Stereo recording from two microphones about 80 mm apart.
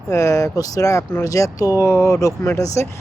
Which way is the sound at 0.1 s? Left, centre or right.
Left.